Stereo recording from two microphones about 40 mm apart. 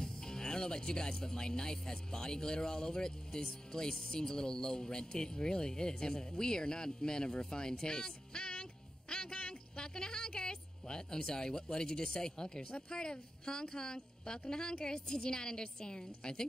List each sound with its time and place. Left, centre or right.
0.0 s speech: centre
9.1 s a sound: centre
11.7 s speech: centre